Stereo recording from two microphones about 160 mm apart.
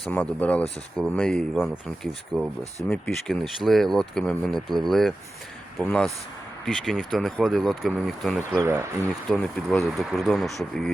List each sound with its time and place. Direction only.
0.0 s speech: 10° left (ahead or behind)
8.5 s speech: 20° right (ahead or behind)
9.3 s speech: centre (ahead or behind)